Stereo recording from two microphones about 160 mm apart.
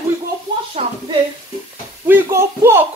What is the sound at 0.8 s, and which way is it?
Speech, 35° right (ahead or behind).